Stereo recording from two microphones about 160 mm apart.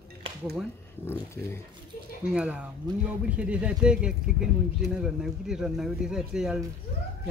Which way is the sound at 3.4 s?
5° right (ahead or behind).